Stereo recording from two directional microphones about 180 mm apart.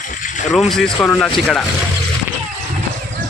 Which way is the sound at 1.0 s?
5° left (ahead or behind).